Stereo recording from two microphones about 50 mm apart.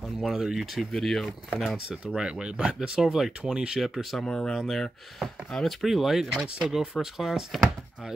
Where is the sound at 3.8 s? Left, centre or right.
Centre.